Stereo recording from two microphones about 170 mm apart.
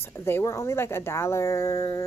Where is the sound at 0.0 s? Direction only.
15° left (ahead or behind).